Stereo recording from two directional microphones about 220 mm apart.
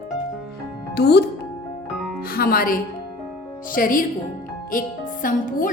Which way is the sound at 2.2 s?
40° left (ahead or behind).